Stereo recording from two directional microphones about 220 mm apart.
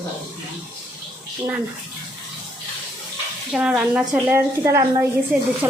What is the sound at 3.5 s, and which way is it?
A woman's voice, 5° right (ahead or behind).